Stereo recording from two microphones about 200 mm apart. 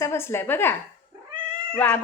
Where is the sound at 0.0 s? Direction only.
15° left (ahead or behind).